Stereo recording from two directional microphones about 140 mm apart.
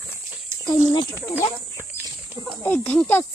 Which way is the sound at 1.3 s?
15° right (ahead or behind).